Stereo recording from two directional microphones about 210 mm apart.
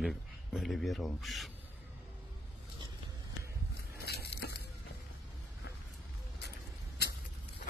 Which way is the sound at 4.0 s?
50° left (ahead or behind).